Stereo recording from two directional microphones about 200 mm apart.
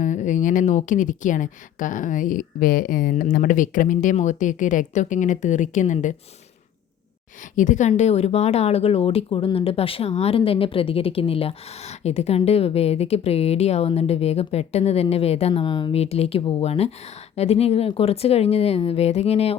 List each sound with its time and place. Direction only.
0.0 s speech: 40° left (ahead or behind)
7.5 s speech: 40° left (ahead or behind)